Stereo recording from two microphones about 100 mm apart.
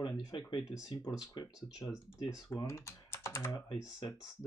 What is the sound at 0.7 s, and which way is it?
Speech, 35° left (ahead or behind).